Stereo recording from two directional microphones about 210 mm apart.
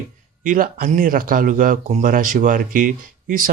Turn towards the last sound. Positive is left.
turn(degrees=-40)  # may be behind; listen again after turning